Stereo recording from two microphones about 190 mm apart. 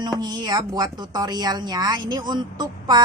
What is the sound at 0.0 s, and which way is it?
Speech, 20° right (ahead or behind).